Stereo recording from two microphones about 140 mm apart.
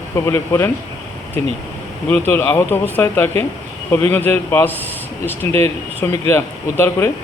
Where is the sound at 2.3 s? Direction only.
15° left (ahead or behind).